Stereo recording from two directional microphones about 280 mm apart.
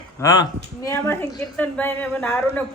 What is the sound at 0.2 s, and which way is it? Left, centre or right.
A woman's voice, centre.